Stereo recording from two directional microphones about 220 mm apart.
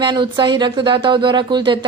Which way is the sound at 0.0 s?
20° right (ahead or behind).